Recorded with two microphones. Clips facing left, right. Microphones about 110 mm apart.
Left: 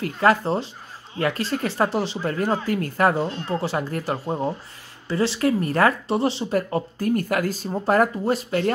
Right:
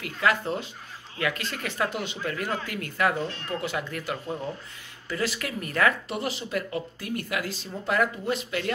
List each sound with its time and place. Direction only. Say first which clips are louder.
0.0 s speech: left 6 dB; 40° left (ahead or behind)